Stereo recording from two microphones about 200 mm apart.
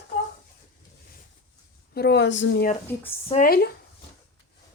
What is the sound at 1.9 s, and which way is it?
Speech, 55° left (ahead or behind).